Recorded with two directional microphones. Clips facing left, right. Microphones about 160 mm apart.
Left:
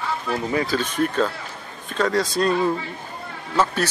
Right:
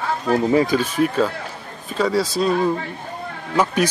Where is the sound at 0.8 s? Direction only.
5° right (ahead or behind).